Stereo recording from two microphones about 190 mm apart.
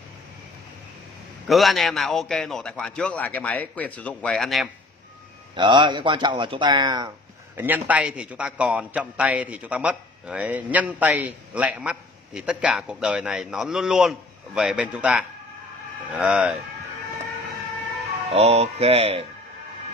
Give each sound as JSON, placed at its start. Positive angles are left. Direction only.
{"t": 1.5, "sound": "a man's voice", "side_deg": 0}
{"t": 5.6, "sound": "speech", "side_deg": -25}
{"t": 7.5, "sound": "a man's voice", "side_deg": -10}
{"t": 18.3, "sound": "speech", "side_deg": -35}